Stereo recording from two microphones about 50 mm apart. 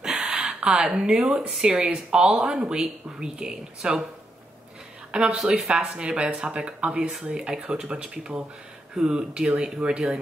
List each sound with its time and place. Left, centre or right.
0.3 s speech: centre
1.7 s speech: right
5.1 s speech: centre
7.0 s speech: centre
7.2 s speech: centre